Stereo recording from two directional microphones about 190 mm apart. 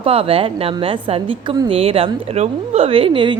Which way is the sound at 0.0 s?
30° right (ahead or behind).